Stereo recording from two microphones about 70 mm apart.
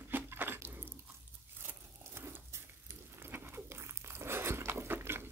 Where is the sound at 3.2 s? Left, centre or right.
Right.